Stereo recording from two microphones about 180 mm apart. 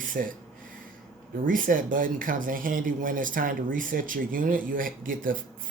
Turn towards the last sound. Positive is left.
turn(degrees=-50)  # may be behind; listen again after turning